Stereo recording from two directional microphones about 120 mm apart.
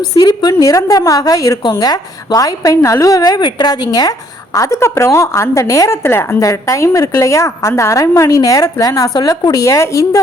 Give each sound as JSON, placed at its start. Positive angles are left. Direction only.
{"t": 0.2, "sound": "a woman's voice", "side_deg": 35}